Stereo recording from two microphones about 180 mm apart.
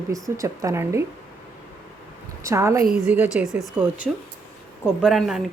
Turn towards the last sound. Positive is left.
turn(degrees=0)  # may be behind; listen again after turning